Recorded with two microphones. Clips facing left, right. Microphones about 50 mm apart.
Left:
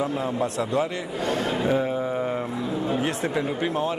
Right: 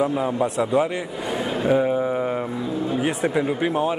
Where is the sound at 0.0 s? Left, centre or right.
Centre.